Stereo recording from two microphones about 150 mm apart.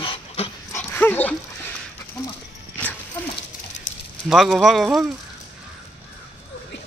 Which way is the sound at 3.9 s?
55° left (ahead or behind).